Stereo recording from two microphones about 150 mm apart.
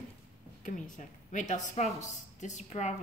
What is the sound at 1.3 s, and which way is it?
A woman's voice, 55° left (ahead or behind).